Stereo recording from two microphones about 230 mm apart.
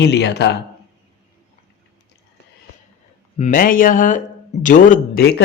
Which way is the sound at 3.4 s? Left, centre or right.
Left.